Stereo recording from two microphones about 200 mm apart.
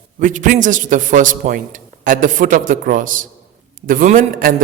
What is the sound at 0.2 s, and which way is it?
A man's voice, 40° right (ahead or behind).